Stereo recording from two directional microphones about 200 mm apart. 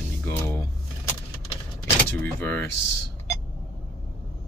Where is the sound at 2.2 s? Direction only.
10° left (ahead or behind).